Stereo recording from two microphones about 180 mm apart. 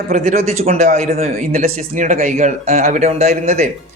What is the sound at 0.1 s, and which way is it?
A man's voice, 40° right (ahead or behind).